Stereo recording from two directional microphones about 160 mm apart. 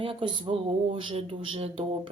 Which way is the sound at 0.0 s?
35° right (ahead or behind).